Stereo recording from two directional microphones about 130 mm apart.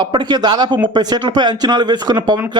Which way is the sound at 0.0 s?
35° right (ahead or behind).